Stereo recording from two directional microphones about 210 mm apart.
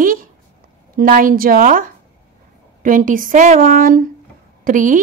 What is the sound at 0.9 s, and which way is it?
A woman's voice, 40° right (ahead or behind).